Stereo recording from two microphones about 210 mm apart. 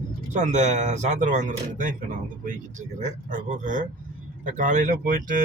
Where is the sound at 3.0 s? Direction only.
40° right (ahead or behind).